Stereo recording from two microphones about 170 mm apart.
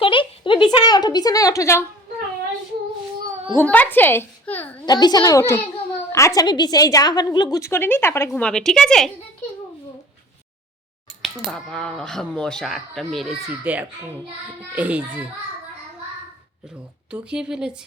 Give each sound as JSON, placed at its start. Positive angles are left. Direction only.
{"t": 0.0, "sound": "speech", "side_deg": 30}
{"t": 3.6, "sound": "a woman's voice", "side_deg": 10}
{"t": 4.9, "sound": "a woman's voice", "side_deg": 25}
{"t": 11.2, "sound": "a child's voice", "side_deg": 0}
{"t": 16.6, "sound": "speech", "side_deg": -5}